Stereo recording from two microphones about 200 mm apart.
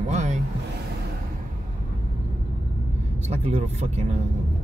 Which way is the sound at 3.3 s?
30° right (ahead or behind).